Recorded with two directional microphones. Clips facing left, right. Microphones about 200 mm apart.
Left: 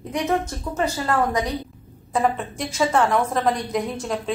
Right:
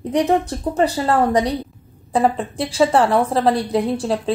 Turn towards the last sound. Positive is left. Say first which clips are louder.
# right 6 dB
turn(degrees=-30)  # may be behind; listen again after turning